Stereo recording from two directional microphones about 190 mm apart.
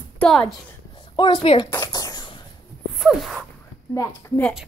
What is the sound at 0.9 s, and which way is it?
Speech, 25° left (ahead or behind).